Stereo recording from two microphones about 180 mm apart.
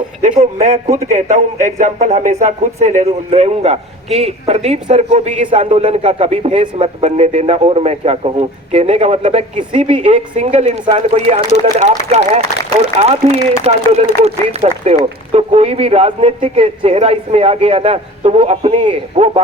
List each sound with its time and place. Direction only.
0.2 s a man's voice: 40° right (ahead or behind)